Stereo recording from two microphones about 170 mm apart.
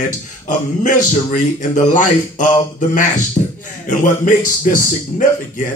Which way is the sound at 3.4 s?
30° left (ahead or behind).